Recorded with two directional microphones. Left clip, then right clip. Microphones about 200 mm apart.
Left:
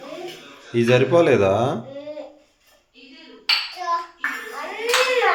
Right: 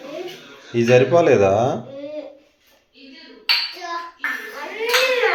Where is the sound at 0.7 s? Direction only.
15° left (ahead or behind).